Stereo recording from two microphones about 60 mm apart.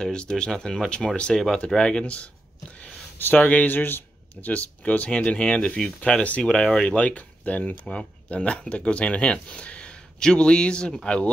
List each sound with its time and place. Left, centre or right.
0.0 s speech: centre
3.2 s speech: left
4.5 s speech: left